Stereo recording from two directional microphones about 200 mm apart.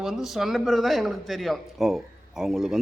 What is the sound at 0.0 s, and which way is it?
A man's voice, centre (ahead or behind).